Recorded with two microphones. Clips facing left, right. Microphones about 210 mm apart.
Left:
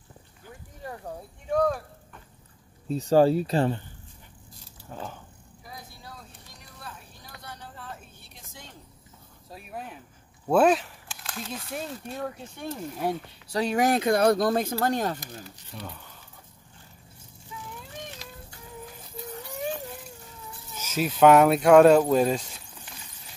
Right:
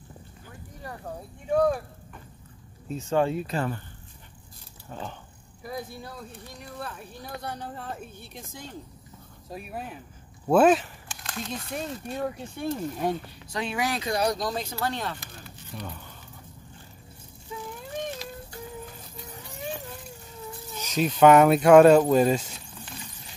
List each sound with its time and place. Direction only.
1.5 s speech: 10° right (ahead or behind)
2.9 s speech: 35° left (ahead or behind)
4.8 s speech: 5° left (ahead or behind)
5.6 s a sound: 60° right (ahead or behind)
7.4 s speech: 55° right (ahead or behind)
9.5 s speech: 5° right (ahead or behind)
13.5 s speech: 40° left (ahead or behind)
15.7 s speech: centre (ahead or behind)
17.5 s a sound: 30° right (ahead or behind)
20.9 s speech: 5° left (ahead or behind)